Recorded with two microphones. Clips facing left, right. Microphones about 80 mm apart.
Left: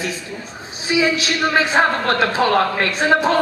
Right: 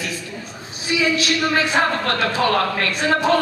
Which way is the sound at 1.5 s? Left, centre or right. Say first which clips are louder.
Left 5 dB; left.